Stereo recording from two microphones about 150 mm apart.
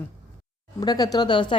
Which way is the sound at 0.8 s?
25° left (ahead or behind).